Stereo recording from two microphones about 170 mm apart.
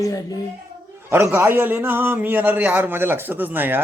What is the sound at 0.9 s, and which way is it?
A man's voice, 15° right (ahead or behind).